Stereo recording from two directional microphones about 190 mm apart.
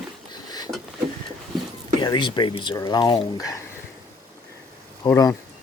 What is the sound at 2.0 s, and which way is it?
Speech, 25° left (ahead or behind).